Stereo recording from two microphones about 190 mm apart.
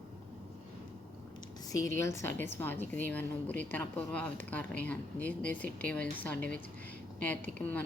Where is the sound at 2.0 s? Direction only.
15° left (ahead or behind).